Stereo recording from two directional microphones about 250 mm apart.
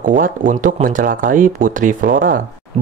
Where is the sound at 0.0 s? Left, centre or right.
Right.